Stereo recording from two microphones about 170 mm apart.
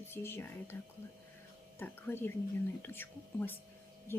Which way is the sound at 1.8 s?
10° left (ahead or behind).